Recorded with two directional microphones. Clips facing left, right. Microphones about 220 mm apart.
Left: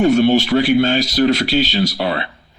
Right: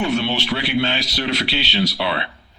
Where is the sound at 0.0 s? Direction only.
45° left (ahead or behind).